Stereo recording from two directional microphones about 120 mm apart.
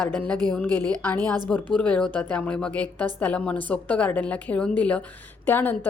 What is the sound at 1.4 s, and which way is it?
Speech, 10° left (ahead or behind).